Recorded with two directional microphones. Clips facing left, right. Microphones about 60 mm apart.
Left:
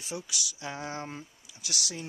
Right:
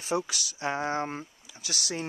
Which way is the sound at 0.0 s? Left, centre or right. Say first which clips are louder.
Right 8 dB; right.